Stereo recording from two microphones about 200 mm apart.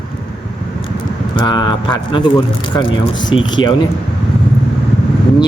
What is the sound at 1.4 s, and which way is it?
Speech, 20° left (ahead or behind).